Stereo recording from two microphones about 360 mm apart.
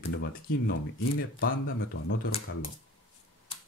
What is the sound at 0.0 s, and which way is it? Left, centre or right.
Speech, left.